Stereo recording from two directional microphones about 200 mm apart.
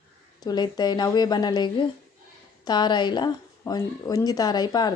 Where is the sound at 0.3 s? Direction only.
20° left (ahead or behind).